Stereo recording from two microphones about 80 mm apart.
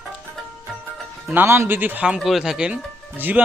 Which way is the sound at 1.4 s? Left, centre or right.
Right.